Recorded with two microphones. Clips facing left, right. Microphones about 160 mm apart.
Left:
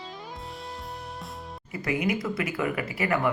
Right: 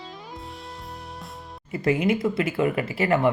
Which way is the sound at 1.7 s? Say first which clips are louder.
Right 5 dB; 25° right (ahead or behind).